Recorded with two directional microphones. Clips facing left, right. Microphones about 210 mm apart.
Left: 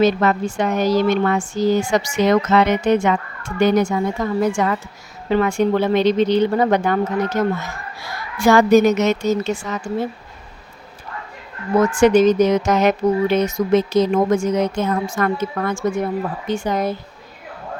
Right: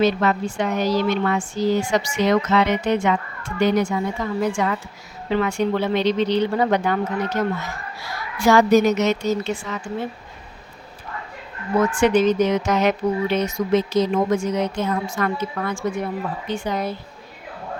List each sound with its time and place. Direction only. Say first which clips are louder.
0.0 s speech: left 3 dB; 45° left (ahead or behind)
8.4 s speech: left 3 dB; 50° left (ahead or behind)
11.8 s speech: left 4 dB; 45° left (ahead or behind)